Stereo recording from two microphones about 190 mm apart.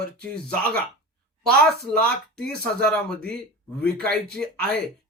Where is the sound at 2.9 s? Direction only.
5° left (ahead or behind).